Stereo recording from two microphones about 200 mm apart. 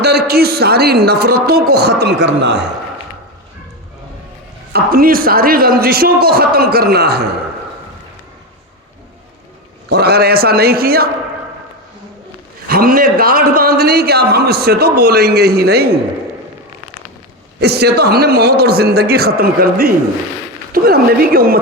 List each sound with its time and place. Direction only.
0.0 s a man's voice: 55° right (ahead or behind)
4.7 s a man's voice: 50° right (ahead or behind)
9.9 s a man's voice: 55° right (ahead or behind)
12.6 s a man's voice: 45° right (ahead or behind)
17.6 s a man's voice: 55° right (ahead or behind)